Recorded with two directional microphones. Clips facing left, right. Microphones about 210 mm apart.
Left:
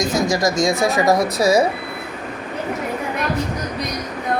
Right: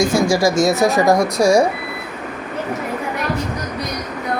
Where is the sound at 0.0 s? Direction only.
25° right (ahead or behind).